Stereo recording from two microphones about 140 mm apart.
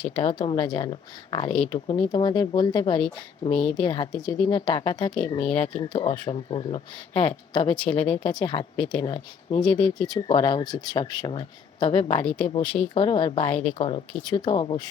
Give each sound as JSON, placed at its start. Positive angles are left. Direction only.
{"t": 0.2, "sound": "speech", "side_deg": 40}
{"t": 1.5, "sound": "speech", "side_deg": 5}
{"t": 1.9, "sound": "speech", "side_deg": 35}
{"t": 5.5, "sound": "speech", "side_deg": 45}
{"t": 5.8, "sound": "speech", "side_deg": 35}
{"t": 7.7, "sound": "speech", "side_deg": 10}
{"t": 8.2, "sound": "speech", "side_deg": 35}
{"t": 12.6, "sound": "speech", "side_deg": 10}
{"t": 12.9, "sound": "speech", "side_deg": 35}
{"t": 13.5, "sound": "speech", "side_deg": 10}
{"t": 13.7, "sound": "speech", "side_deg": 40}
{"t": 14.3, "sound": "speech", "side_deg": 30}